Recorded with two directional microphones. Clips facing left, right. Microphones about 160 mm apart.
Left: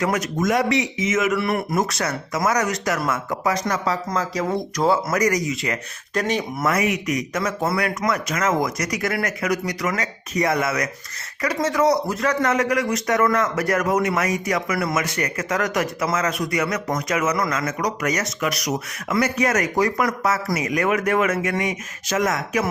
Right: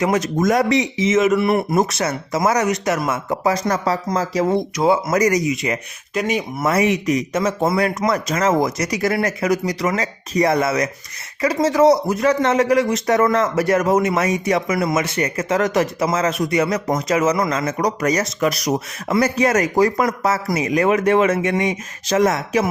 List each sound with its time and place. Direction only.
0.0 s speech: 30° right (ahead or behind)
4.8 s speech: 10° right (ahead or behind)
5.1 s speech: 25° right (ahead or behind)
6.1 s speech: 10° right (ahead or behind)
6.7 s speech: 30° right (ahead or behind)